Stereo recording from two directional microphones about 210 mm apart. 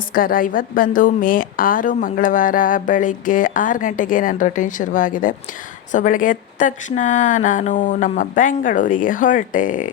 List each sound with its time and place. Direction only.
0.1 s a woman's voice: 40° left (ahead or behind)